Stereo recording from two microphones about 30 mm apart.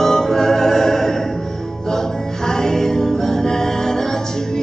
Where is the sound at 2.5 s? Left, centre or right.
Centre.